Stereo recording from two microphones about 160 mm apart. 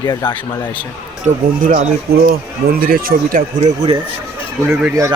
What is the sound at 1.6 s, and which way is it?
Speech, 55° right (ahead or behind).